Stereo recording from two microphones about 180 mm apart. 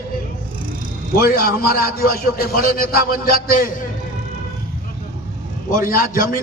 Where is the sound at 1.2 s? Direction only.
55° left (ahead or behind).